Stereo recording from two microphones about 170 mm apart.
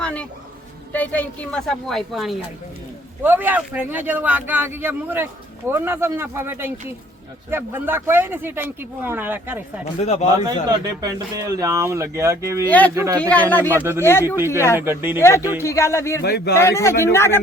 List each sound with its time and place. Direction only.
0.0 s a sound: 5° left (ahead or behind)
0.9 s a woman's voice: 10° left (ahead or behind)
3.2 s speech: 10° right (ahead or behind)
10.0 s speech: 40° left (ahead or behind)
10.4 s speech: 20° right (ahead or behind)
13.2 s a man's voice: 10° left (ahead or behind)
14.3 s speech: 15° right (ahead or behind)
15.6 s a man's voice: 15° left (ahead or behind)
16.2 s speech: 70° left (ahead or behind)
16.6 s a man's voice: 15° left (ahead or behind)